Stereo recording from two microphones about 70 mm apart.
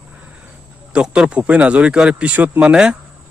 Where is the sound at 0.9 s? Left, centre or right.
Centre.